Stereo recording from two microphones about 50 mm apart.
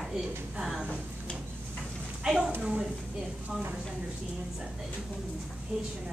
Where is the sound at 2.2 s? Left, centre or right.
Centre.